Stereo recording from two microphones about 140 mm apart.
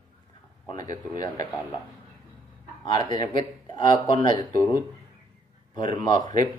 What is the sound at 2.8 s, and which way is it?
Speech, 30° left (ahead or behind).